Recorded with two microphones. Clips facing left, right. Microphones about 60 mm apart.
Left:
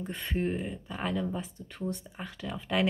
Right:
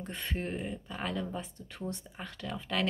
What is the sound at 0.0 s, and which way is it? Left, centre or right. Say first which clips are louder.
Speech: left 5 dB; centre.